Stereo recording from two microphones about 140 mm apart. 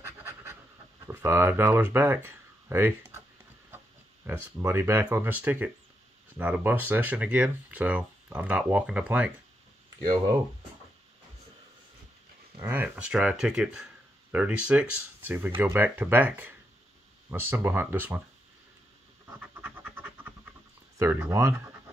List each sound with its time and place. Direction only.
1.0 s speech: 15° right (ahead or behind)
4.3 s speech: 15° right (ahead or behind)
12.6 s speech: 10° right (ahead or behind)
19.4 s pant: 10° right (ahead or behind)
21.0 s speech: 15° right (ahead or behind)